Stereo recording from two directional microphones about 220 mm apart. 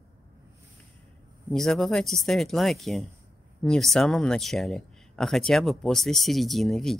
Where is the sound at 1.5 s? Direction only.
Centre (ahead or behind).